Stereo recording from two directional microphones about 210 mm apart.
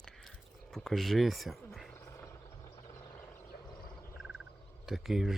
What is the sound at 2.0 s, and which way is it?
Vehicle, 15° left (ahead or behind).